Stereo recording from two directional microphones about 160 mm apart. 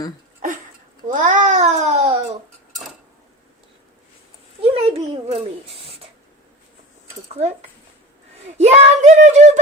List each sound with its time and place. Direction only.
1.0 s babbling: 55° right (ahead or behind)
4.6 s a sound: 40° right (ahead or behind)
8.5 s speech: 45° right (ahead or behind)